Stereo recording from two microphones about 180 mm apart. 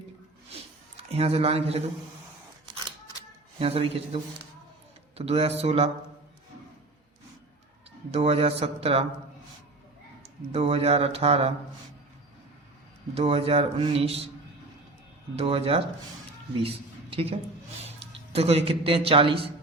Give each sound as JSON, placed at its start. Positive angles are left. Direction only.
{"t": 0.9, "sound": "speech", "side_deg": -35}
{"t": 3.6, "sound": "a man's voice", "side_deg": -30}
{"t": 8.1, "sound": "a man's voice", "side_deg": -35}
{"t": 10.5, "sound": "a man's voice", "side_deg": -35}
{"t": 13.1, "sound": "a man's voice", "side_deg": -35}
{"t": 15.4, "sound": "a man's voice", "side_deg": -30}
{"t": 17.1, "sound": "a woman's voice", "side_deg": -30}